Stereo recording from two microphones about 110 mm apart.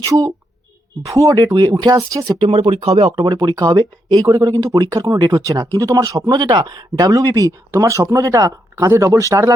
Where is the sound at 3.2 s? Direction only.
40° right (ahead or behind).